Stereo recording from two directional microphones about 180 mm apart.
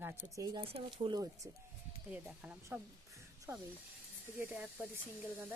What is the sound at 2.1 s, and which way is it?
Speech, 5° right (ahead or behind).